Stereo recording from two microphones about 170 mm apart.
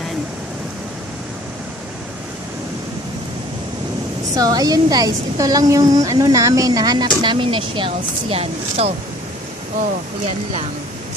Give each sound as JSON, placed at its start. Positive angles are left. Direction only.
{"t": 4.4, "sound": "a woman's voice", "side_deg": -20}